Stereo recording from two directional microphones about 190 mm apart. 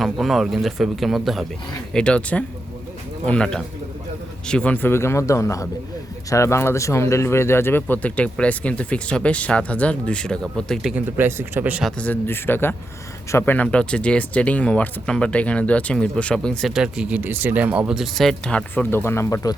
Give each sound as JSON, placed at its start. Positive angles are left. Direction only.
{"t": 0.0, "sound": "speech", "side_deg": 0}
{"t": 10.9, "sound": "speech", "side_deg": -10}